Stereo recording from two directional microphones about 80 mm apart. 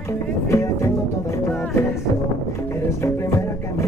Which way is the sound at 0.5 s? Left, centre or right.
Left.